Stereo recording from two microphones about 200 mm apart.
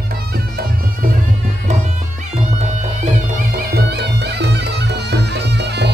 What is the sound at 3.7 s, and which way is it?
Music, 55° right (ahead or behind).